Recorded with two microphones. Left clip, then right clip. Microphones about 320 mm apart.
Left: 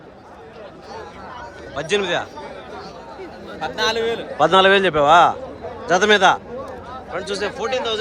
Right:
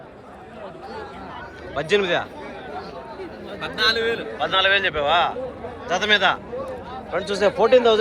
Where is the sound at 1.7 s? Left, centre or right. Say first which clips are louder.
Even; centre.